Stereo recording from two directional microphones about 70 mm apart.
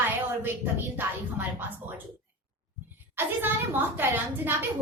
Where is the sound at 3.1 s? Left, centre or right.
Right.